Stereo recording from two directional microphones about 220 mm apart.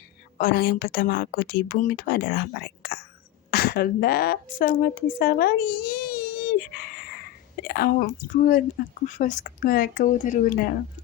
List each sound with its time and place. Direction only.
0.3 s a woman's voice: 40° left (ahead or behind)
6.6 s a sound: 45° left (ahead or behind)
7.7 s speech: 45° left (ahead or behind)